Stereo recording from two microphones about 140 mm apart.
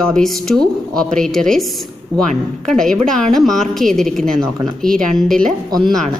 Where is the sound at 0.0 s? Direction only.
5° left (ahead or behind).